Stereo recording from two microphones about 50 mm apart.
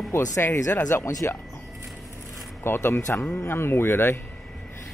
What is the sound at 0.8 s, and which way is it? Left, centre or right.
Speech, left.